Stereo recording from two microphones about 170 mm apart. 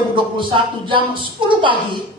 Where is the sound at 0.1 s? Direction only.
30° right (ahead or behind).